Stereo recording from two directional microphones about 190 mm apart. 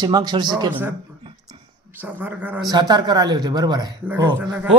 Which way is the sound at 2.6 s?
20° right (ahead or behind).